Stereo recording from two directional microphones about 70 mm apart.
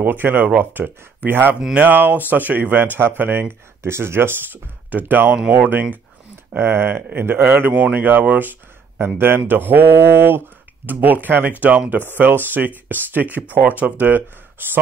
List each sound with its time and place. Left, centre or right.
0.0 s speech: right
1.6 s speech: centre
1.9 s a man's voice: right